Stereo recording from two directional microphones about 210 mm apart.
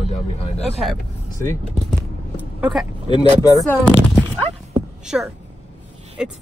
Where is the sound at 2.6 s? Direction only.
Centre (ahead or behind).